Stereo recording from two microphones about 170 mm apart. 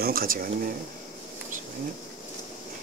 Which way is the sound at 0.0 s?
60° right (ahead or behind).